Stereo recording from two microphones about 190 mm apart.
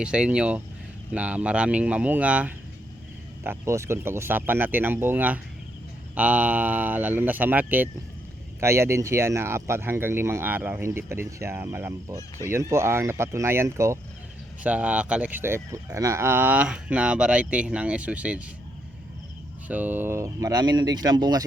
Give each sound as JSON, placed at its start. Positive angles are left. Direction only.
{"t": 0.0, "sound": "speech", "side_deg": -5}
{"t": 19.6, "sound": "speech", "side_deg": -10}